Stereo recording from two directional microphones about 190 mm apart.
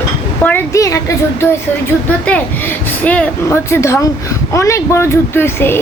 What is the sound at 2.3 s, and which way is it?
Speech, 5° left (ahead or behind).